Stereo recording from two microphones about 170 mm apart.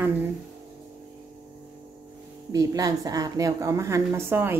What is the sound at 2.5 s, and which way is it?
A woman's voice, 20° right (ahead or behind).